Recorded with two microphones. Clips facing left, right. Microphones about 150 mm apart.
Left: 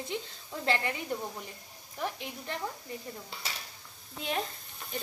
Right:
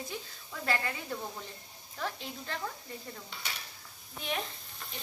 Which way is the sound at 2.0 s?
15° left (ahead or behind).